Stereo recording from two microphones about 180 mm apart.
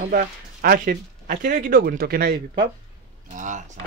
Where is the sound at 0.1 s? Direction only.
50° right (ahead or behind).